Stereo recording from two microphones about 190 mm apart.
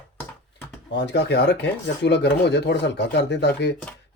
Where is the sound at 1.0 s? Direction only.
65° left (ahead or behind).